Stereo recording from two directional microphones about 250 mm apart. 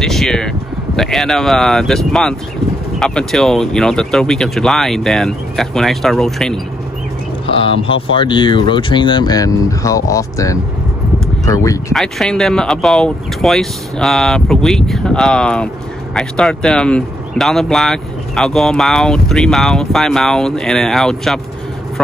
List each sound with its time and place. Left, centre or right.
0.0 s speech: centre
7.4 s speech: left
11.9 s speech: centre